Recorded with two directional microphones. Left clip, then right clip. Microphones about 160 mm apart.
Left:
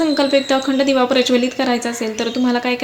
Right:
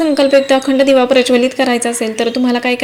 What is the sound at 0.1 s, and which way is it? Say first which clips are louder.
A woman's voice: right 5 dB; 15° right (ahead or behind).